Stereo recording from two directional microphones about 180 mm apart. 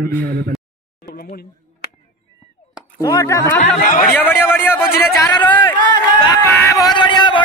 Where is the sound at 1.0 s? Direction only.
65° left (ahead or behind).